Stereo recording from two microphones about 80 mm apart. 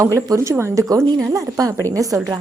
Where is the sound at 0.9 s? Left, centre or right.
Right.